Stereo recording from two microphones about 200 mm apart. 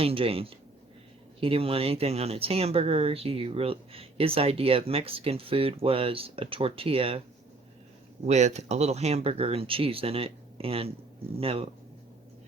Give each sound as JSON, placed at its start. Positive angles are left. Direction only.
{"t": 0.0, "sound": "speech", "side_deg": -30}
{"t": 8.3, "sound": "speech", "side_deg": -35}